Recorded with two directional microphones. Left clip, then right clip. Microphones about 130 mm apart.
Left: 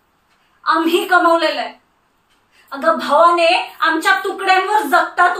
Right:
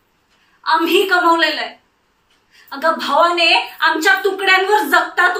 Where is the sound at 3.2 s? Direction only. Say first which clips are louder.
Even; 20° left (ahead or behind).